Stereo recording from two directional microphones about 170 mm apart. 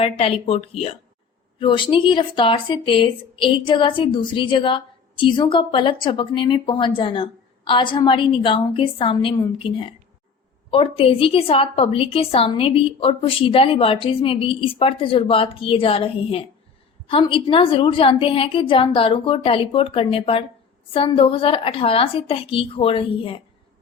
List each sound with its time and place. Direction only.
0.0 s a woman's voice: 35° left (ahead or behind)